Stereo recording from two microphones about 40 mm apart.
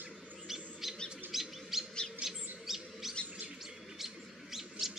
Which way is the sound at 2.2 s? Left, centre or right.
Centre.